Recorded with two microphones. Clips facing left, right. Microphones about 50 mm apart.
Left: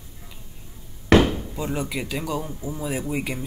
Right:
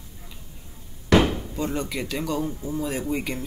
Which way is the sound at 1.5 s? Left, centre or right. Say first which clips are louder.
Even; centre.